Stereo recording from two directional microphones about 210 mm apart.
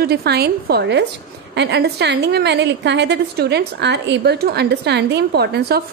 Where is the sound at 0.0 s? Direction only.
50° right (ahead or behind).